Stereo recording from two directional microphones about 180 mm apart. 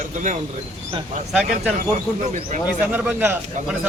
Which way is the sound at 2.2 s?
45° right (ahead or behind).